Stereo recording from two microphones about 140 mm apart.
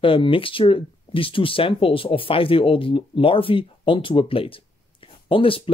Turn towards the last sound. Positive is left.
turn(degrees=40)  # may be behind; listen again after turning